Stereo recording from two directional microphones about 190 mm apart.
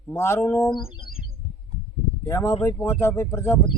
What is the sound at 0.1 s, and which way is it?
Speech, 15° left (ahead or behind).